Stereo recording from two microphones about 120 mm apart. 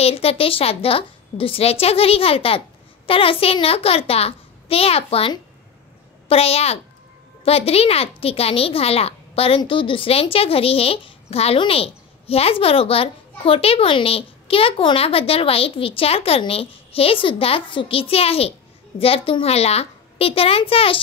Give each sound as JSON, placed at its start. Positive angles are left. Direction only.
{"t": 0.0, "sound": "a woman's voice", "side_deg": 55}